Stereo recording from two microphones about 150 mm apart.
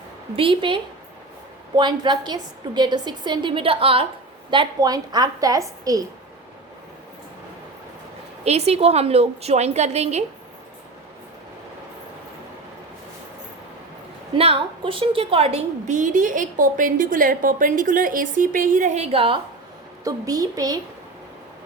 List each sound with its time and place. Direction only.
0.3 s a woman's voice: 35° right (ahead or behind)
8.4 s a woman's voice: 45° right (ahead or behind)
14.3 s a woman's voice: 40° right (ahead or behind)
20.1 s a woman's voice: 25° right (ahead or behind)